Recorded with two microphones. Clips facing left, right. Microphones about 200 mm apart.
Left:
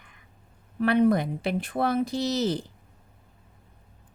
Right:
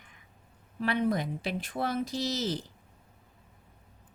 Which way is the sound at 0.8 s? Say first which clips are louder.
Left 7 dB; 55° left (ahead or behind).